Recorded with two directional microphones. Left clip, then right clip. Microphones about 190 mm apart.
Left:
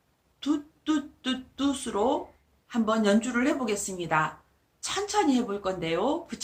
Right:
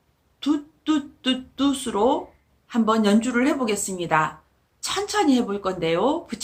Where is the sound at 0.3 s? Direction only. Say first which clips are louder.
Right 5 dB; 20° right (ahead or behind).